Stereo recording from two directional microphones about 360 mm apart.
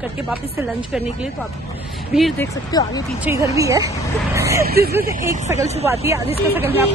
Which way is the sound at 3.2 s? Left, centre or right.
Centre.